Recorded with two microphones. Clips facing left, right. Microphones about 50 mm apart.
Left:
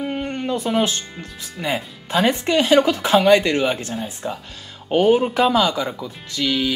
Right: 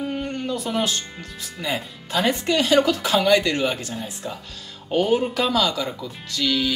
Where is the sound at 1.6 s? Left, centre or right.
Left.